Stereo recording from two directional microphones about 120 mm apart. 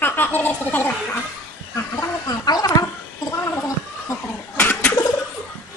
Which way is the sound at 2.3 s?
35° left (ahead or behind).